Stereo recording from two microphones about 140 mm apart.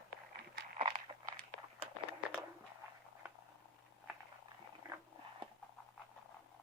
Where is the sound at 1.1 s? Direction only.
35° right (ahead or behind).